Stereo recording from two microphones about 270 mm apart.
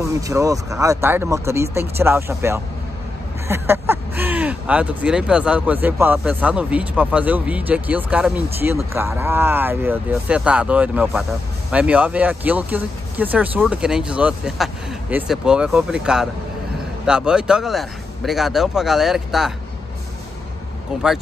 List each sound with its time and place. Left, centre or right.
0.0 s speech: centre